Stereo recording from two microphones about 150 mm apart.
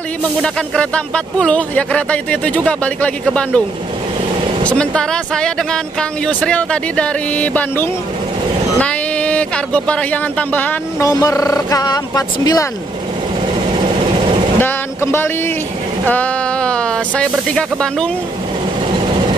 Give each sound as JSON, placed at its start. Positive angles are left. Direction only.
{"t": 0.4, "sound": "speech", "side_deg": 5}
{"t": 4.6, "sound": "speech", "side_deg": 5}
{"t": 11.1, "sound": "speech", "side_deg": 25}
{"t": 14.6, "sound": "speech", "side_deg": 15}